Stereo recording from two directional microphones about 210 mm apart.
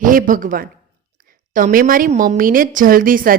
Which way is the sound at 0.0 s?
40° right (ahead or behind).